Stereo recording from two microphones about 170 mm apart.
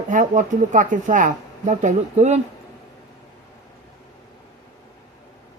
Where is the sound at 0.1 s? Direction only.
45° right (ahead or behind).